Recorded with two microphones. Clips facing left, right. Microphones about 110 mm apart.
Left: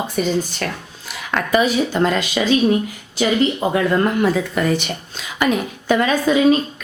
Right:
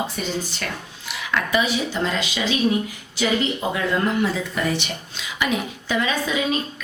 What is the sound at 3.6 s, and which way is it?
A woman's voice, 45° left (ahead or behind).